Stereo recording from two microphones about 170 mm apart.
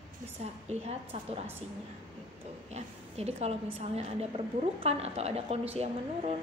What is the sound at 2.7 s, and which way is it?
A woman's voice, 40° right (ahead or behind).